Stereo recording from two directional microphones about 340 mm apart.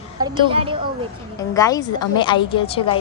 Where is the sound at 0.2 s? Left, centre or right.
Centre.